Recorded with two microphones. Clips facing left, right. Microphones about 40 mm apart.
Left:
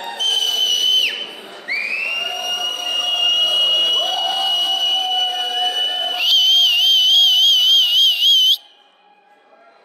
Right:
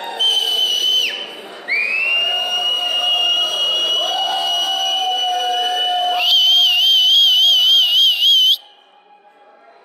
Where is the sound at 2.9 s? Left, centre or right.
Centre.